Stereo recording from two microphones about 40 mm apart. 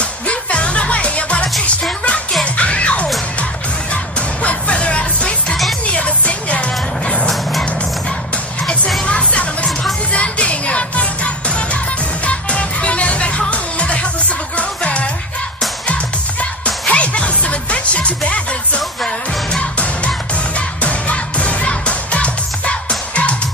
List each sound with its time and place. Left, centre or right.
0.3 s music: left
2.5 s music: left
9.0 s music: left
16.9 s music: left
20.5 s music: left